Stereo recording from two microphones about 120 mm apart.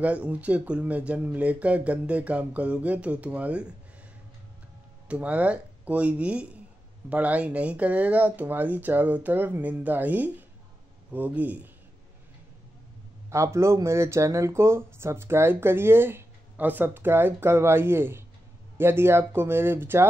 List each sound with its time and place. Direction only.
0.0 s speech: 10° right (ahead or behind)
5.0 s speech: 10° right (ahead or behind)
13.3 s speech: 25° right (ahead or behind)